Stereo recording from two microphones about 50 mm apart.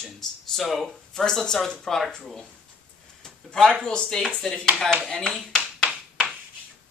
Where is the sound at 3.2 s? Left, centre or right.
Centre.